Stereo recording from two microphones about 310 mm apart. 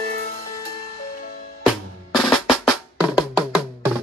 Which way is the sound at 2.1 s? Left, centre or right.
Centre.